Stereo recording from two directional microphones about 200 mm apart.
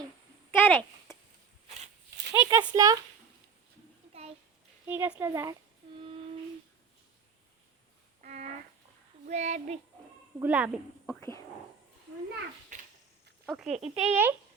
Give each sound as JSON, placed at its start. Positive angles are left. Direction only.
{"t": 0.5, "sound": "a sound", "side_deg": 10}
{"t": 1.1, "sound": "chop", "side_deg": 15}
{"t": 2.3, "sound": "speech", "side_deg": -10}
{"t": 4.1, "sound": "a sound", "side_deg": -30}
{"t": 4.9, "sound": "a woman's voice", "side_deg": -10}
{"t": 8.2, "sound": "a sound", "side_deg": -35}
{"t": 9.3, "sound": "child singing", "side_deg": -35}
{"t": 10.4, "sound": "a woman's voice", "side_deg": -5}
{"t": 11.0, "sound": "speech", "side_deg": 10}
{"t": 13.5, "sound": "speech", "side_deg": 0}
{"t": 13.7, "sound": "child singing", "side_deg": -35}